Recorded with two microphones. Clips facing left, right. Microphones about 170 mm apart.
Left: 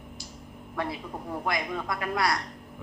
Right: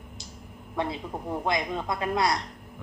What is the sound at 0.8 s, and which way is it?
A woman's voice, 20° right (ahead or behind).